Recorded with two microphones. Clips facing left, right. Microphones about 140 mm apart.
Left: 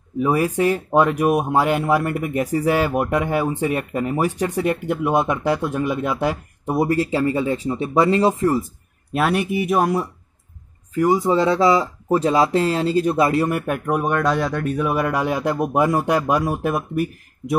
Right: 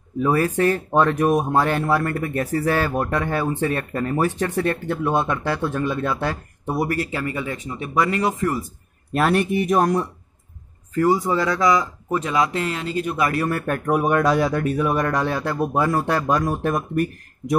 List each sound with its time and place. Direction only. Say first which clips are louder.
0.2 s speech: left 1 dB; 15° left (ahead or behind)
9.1 s speech: right 1 dB; 5° left (ahead or behind)
11.0 s speech: left 2 dB; 20° left (ahead or behind)
13.8 s speech: right 2 dB; 5° right (ahead or behind)